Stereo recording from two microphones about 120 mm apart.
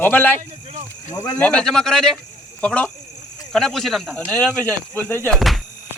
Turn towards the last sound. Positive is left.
turn(degrees=0)  # may be behind; listen again after turning